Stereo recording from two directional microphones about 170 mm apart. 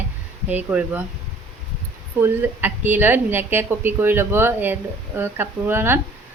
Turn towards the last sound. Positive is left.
turn(degrees=-15)  # may be behind; listen again after turning